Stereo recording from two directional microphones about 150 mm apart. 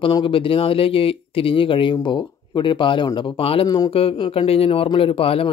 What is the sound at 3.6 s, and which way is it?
Speech, 25° left (ahead or behind).